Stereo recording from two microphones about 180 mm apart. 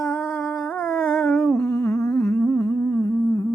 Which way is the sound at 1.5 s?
15° left (ahead or behind).